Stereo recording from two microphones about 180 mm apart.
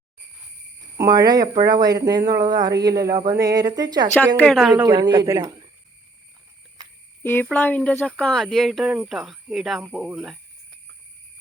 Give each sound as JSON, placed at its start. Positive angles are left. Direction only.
{"t": 0.9, "sound": "speech", "side_deg": -20}
{"t": 4.4, "sound": "speech", "side_deg": 0}
{"t": 4.7, "sound": "speech", "side_deg": -25}
{"t": 7.2, "sound": "speech", "side_deg": 10}